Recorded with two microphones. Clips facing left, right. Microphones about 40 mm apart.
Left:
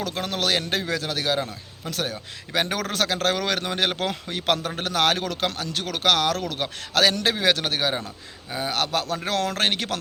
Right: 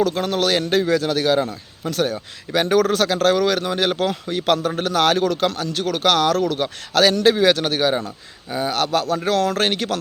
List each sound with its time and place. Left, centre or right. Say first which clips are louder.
0.0 s a man's voice: right 7 dB; centre
8.7 s a man's voice: right 5 dB; centre